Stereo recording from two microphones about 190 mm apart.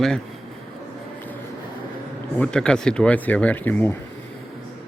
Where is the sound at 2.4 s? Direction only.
5° left (ahead or behind).